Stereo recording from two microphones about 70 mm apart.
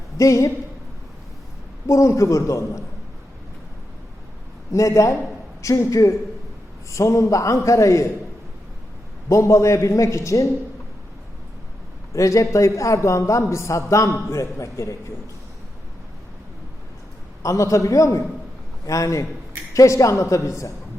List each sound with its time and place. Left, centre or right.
0.2 s a man's voice: left
1.9 s a man's voice: left
4.7 s a man's voice: left
9.3 s a man's voice: left
12.1 s a man's voice: left
17.4 s a man's voice: left